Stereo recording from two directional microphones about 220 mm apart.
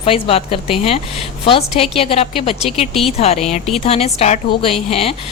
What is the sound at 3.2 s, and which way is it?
Speech, 30° left (ahead or behind).